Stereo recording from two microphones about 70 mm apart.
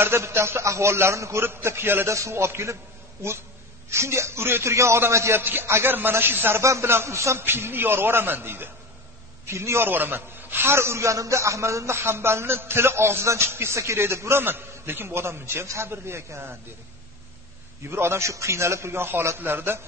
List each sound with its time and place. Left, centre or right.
0.0 s a man's voice: right
6.6 s a man's voice: right
17.8 s a man's voice: right